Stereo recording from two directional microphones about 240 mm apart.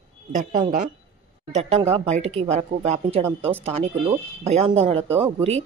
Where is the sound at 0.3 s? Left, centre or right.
Right.